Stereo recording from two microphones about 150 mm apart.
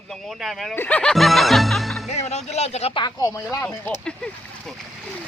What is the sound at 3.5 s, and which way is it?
Speech, 15° left (ahead or behind).